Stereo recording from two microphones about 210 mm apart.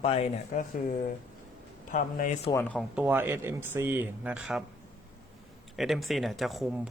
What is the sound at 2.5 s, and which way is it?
Speech, 5° left (ahead or behind).